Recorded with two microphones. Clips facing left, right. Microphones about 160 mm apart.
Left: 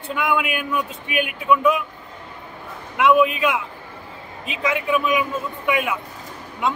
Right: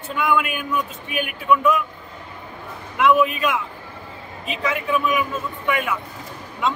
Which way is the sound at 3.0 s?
15° left (ahead or behind).